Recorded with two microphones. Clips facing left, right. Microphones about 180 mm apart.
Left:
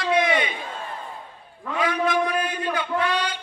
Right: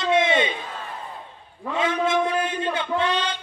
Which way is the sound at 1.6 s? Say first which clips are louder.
Right 1 dB; 25° right (ahead or behind).